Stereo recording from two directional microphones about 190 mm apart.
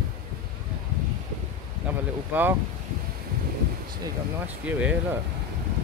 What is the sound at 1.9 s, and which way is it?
Speech, 10° right (ahead or behind).